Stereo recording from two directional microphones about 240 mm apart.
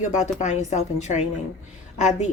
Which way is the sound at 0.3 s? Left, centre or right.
Left.